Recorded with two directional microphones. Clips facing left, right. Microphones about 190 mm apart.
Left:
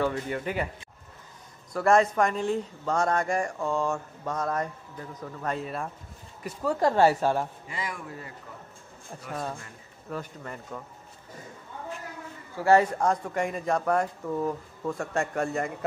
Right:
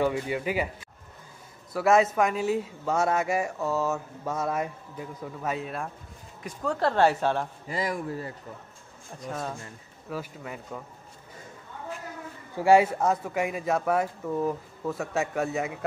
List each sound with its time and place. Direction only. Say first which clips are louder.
0.0 s speech: right 2 dB; 10° right (ahead or behind)
1.7 s a man's voice: even; 5° right (ahead or behind)
7.6 s a man's voice: right 6 dB; 40° right (ahead or behind)
9.3 s a man's voice: even; centre (ahead or behind)
12.5 s a man's voice: right 1 dB; 10° right (ahead or behind)